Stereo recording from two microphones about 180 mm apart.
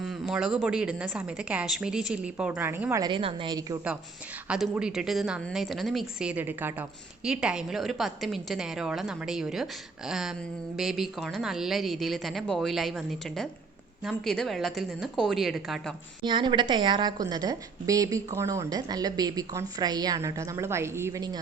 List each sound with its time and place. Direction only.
0.0 s a woman's voice: 5° right (ahead or behind); by 3.8 s 25° right (ahead or behind)
4.4 s a woman's voice: 5° right (ahead or behind)
16.2 s a woman's voice: 25° right (ahead or behind)